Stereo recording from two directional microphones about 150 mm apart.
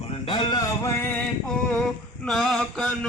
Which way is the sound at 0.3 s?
35° left (ahead or behind).